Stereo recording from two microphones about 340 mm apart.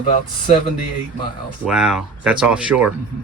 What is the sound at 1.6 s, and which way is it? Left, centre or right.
Speech, centre.